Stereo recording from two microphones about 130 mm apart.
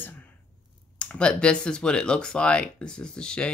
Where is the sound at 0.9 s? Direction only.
5° left (ahead or behind).